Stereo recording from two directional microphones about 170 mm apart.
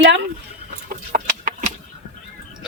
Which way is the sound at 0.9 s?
55° right (ahead or behind).